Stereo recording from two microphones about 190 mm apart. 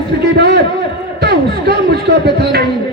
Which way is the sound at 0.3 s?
55° right (ahead or behind).